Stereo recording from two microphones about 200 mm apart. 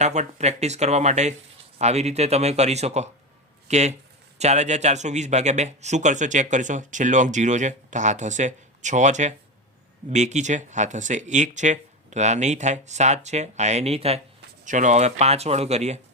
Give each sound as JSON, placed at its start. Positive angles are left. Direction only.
{"t": 0.0, "sound": "speech", "side_deg": -35}